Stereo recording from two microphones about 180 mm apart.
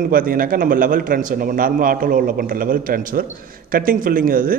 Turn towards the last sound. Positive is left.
turn(degrees=-50)  # may be behind; listen again after turning